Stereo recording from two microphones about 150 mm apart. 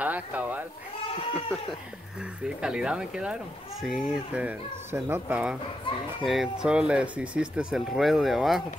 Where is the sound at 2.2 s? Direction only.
5° right (ahead or behind).